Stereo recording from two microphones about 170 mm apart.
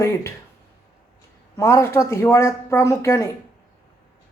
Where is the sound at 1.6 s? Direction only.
15° left (ahead or behind).